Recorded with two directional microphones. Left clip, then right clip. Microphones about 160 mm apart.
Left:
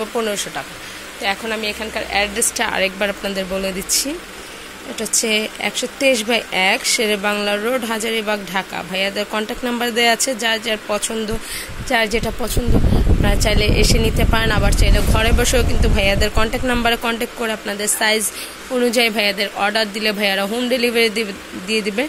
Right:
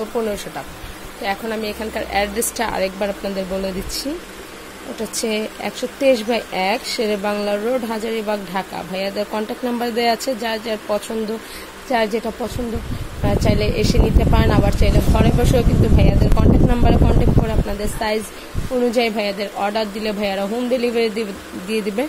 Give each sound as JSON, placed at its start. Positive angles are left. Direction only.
{"t": 0.2, "sound": "speech", "side_deg": -10}
{"t": 2.7, "sound": "speech", "side_deg": -5}